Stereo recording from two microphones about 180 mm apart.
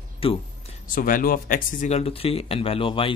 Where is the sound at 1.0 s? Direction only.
50° left (ahead or behind).